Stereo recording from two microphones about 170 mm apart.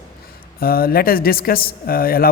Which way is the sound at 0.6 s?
60° left (ahead or behind).